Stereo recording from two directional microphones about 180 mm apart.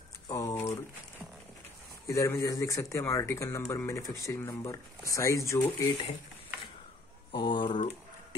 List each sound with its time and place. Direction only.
0.3 s speech: 15° left (ahead or behind)
2.0 s speech: 15° left (ahead or behind)
7.3 s speech: 25° left (ahead or behind)